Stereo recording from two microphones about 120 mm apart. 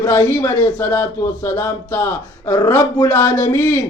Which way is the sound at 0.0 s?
25° left (ahead or behind).